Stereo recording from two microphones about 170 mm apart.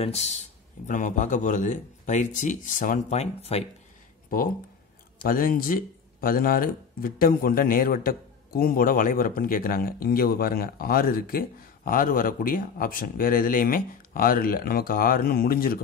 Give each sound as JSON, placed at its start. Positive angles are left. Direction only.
{"t": 0.0, "sound": "a man's voice", "side_deg": 40}
{"t": 5.2, "sound": "speech", "side_deg": 55}